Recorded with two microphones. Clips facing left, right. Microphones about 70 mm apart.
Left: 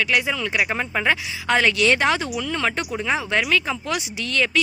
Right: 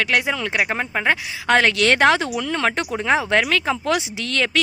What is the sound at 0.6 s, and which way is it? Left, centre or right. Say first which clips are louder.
Speech: right 1 dB; right.